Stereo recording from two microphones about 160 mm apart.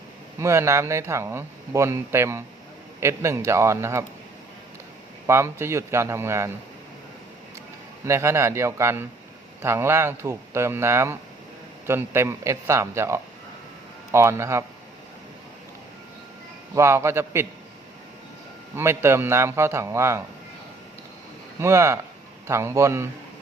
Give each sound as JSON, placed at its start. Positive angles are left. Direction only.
{"t": 0.3, "sound": "speech", "side_deg": -20}
{"t": 5.2, "sound": "speech", "side_deg": -15}
{"t": 8.0, "sound": "speech", "side_deg": -15}
{"t": 16.7, "sound": "speech", "side_deg": -20}
{"t": 18.8, "sound": "speech", "side_deg": -15}
{"t": 21.6, "sound": "speech", "side_deg": -20}